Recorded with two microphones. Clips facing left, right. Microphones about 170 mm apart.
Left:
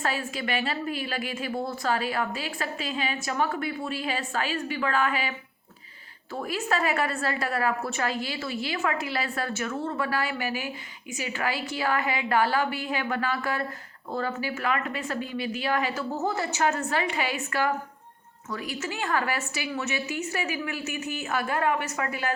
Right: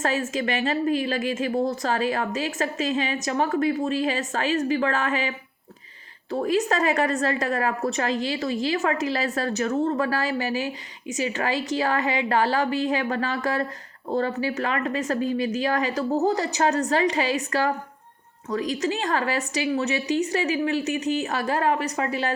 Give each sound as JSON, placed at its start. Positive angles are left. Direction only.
{"t": 0.0, "sound": "a woman's voice", "side_deg": -40}
{"t": 6.3, "sound": "a woman's voice", "side_deg": -40}